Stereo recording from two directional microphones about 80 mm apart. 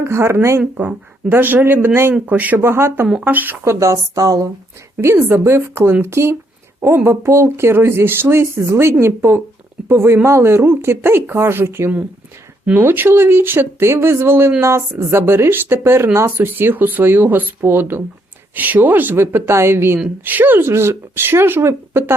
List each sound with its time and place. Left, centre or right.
0.0 s speech: right
0.8 s speech: right
3.6 s speech: right
4.9 s speech: right